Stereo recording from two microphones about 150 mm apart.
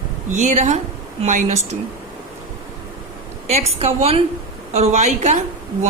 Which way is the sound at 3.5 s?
45° right (ahead or behind).